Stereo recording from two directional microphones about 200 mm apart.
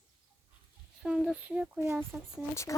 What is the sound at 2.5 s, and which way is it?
Speech, 15° left (ahead or behind).